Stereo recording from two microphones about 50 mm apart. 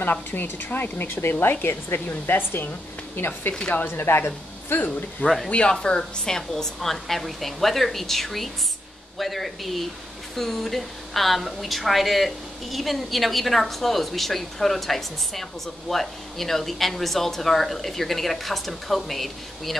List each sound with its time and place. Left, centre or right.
0.0 s a woman's voice: left
3.8 s a woman's voice: left
5.5 s a woman's voice: left; by 19.7 s centre